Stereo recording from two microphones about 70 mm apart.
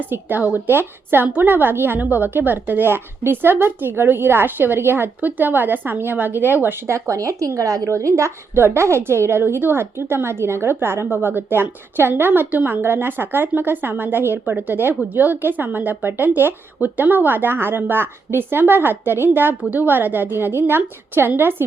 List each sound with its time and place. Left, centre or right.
0.0 s a woman's voice: right
7.1 s speech: right
7.9 s a woman's voice: right